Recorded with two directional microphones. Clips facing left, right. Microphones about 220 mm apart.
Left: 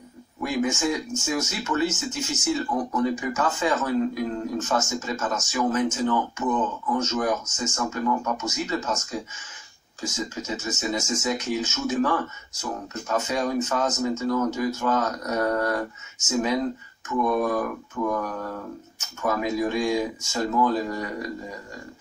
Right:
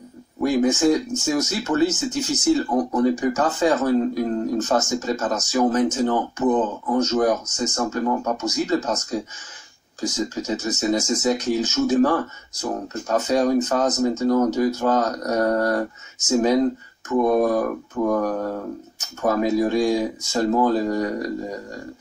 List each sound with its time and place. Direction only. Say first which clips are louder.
0.4 s speech: right 7 dB; 35° right (ahead or behind)